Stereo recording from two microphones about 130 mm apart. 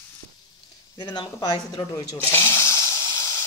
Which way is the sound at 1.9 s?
20° left (ahead or behind).